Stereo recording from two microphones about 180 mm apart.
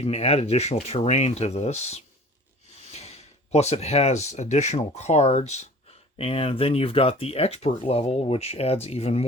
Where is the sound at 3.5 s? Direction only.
35° left (ahead or behind).